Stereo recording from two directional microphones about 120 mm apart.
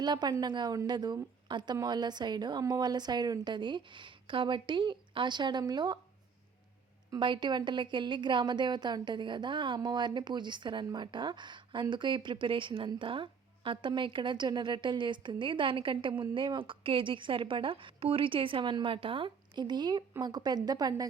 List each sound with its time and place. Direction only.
0.0 s a woman's voice: 35° right (ahead or behind)
7.1 s a woman's voice: 40° right (ahead or behind)